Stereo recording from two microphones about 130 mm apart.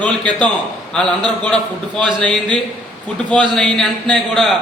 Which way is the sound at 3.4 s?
5° left (ahead or behind).